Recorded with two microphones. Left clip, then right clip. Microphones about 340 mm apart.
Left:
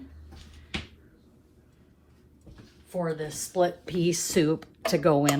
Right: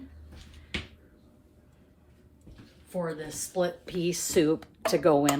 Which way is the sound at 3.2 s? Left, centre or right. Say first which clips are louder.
Left 6 dB; centre.